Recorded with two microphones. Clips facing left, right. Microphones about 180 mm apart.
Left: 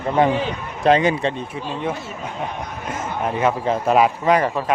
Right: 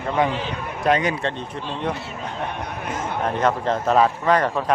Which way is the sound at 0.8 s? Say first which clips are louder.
Left 4 dB; 30° left (ahead or behind).